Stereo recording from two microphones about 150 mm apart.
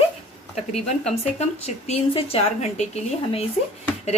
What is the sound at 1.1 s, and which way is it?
Speech, 45° left (ahead or behind).